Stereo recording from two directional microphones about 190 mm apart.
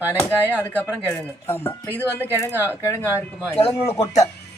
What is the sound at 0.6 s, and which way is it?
Speech, 10° left (ahead or behind).